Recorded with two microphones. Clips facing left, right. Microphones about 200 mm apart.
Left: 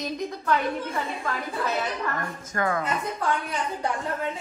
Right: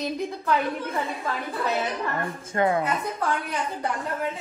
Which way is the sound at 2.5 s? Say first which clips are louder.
Right 4 dB; 25° right (ahead or behind).